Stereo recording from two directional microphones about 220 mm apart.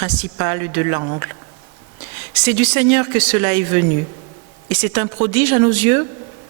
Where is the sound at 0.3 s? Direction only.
20° right (ahead or behind).